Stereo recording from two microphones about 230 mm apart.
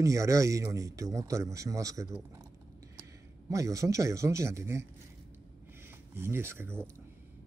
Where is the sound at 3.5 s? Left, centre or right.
Centre.